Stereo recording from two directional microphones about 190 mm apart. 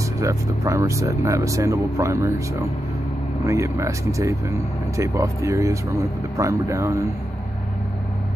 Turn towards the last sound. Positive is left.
turn(degrees=-15)  # may be behind; listen again after turning